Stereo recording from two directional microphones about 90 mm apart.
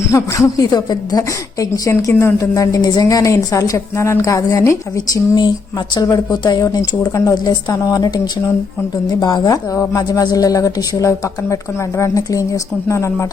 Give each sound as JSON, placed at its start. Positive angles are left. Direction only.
{"t": 0.1, "sound": "a woman's voice", "side_deg": 40}
{"t": 4.2, "sound": "a woman's voice", "side_deg": 45}
{"t": 7.1, "sound": "a woman's voice", "side_deg": 35}
{"t": 7.4, "sound": "speech", "side_deg": 45}
{"t": 9.7, "sound": "a woman's voice", "side_deg": 35}